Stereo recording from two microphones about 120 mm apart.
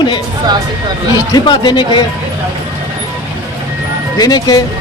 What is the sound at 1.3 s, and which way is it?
Speech, 40° left (ahead or behind).